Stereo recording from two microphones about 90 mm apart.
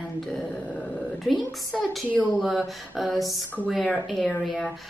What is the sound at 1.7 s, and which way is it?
Speech, centre (ahead or behind).